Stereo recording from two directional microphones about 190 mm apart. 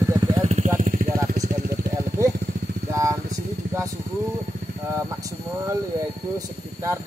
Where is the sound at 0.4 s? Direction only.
35° right (ahead or behind).